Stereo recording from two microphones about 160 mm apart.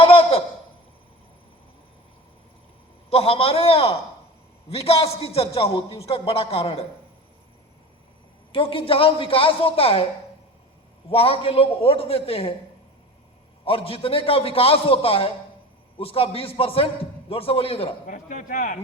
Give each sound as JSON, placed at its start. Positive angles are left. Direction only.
{"t": 0.0, "sound": "a sound", "side_deg": 35}
{"t": 3.1, "sound": "a man's voice", "side_deg": 35}
{"t": 8.5, "sound": "a man's voice", "side_deg": 35}
{"t": 11.1, "sound": "a man's voice", "side_deg": 35}
{"t": 13.7, "sound": "a man's voice", "side_deg": 35}
{"t": 18.0, "sound": "speech", "side_deg": 55}